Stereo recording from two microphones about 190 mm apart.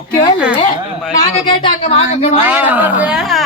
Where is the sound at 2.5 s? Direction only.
10° right (ahead or behind).